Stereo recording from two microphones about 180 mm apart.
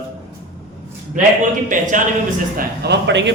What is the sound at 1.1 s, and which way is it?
Speech, 45° right (ahead or behind).